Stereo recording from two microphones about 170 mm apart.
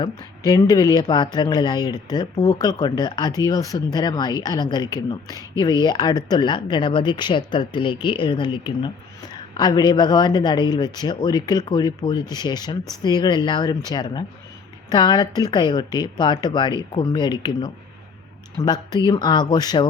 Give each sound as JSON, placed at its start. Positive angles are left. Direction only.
{"t": 0.0, "sound": "speech", "side_deg": 20}